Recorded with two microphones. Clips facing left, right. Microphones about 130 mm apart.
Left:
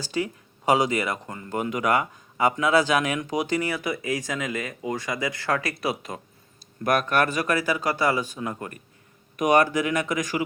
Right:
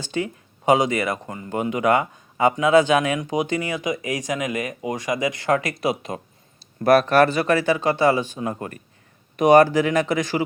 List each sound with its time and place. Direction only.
0.0 s speech: 20° right (ahead or behind)